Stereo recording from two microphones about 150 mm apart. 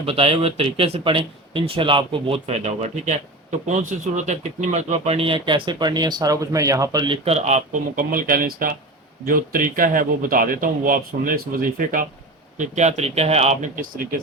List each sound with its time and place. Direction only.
0.0 s speech: 40° right (ahead or behind)
2.5 s speech: 50° right (ahead or behind); by 7.2 s 30° right (ahead or behind)
7.3 s speech: 45° right (ahead or behind); by 12.0 s 65° right (ahead or behind)
12.5 s speech: 50° right (ahead or behind); by 14.2 s 70° right (ahead or behind)